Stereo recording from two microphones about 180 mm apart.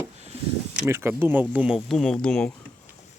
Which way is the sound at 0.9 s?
15° right (ahead or behind).